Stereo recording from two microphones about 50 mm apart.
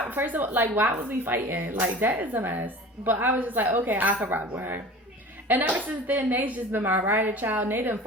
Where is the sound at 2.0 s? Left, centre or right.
Right.